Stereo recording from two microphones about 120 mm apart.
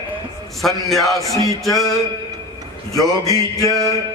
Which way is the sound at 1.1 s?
30° left (ahead or behind).